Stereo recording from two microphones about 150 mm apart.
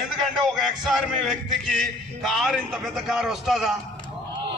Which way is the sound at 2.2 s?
Centre (ahead or behind).